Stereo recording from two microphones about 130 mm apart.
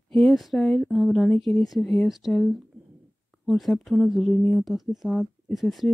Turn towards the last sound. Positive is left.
turn(degrees=0)  # may be behind; listen again after turning